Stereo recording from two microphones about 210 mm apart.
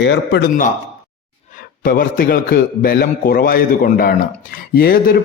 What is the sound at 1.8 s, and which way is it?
A man's voice, 45° left (ahead or behind).